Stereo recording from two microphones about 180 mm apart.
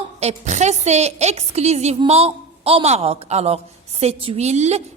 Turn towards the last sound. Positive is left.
turn(degrees=-40)  # may be behind; listen again after turning